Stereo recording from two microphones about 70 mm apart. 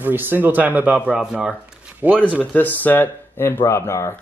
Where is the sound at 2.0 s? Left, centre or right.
Right.